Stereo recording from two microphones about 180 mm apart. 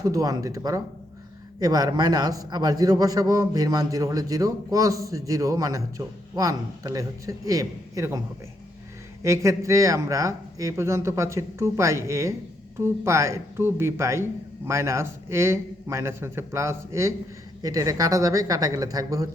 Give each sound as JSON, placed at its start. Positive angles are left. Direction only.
{"t": 0.0, "sound": "a man's voice", "side_deg": -20}
{"t": 9.2, "sound": "a man's voice", "side_deg": -15}